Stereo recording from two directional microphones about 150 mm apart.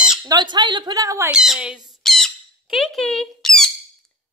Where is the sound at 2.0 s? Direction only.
Centre (ahead or behind).